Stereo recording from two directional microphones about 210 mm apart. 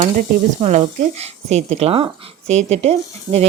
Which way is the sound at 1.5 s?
30° right (ahead or behind).